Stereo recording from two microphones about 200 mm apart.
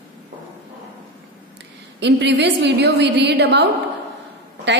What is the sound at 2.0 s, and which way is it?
A woman's voice, 60° right (ahead or behind).